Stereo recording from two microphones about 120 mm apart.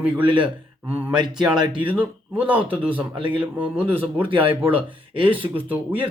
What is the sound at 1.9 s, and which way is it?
A man's voice, 15° right (ahead or behind).